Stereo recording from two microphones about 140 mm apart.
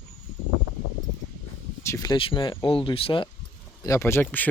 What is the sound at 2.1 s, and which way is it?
Speech, 35° left (ahead or behind).